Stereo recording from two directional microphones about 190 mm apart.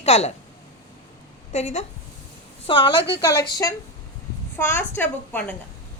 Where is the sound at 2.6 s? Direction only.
25° left (ahead or behind); by 5.5 s 10° left (ahead or behind).